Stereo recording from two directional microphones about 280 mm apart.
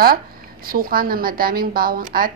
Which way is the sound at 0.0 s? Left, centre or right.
Right.